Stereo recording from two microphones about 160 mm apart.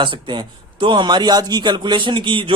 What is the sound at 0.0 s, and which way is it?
A man's voice, 30° right (ahead or behind).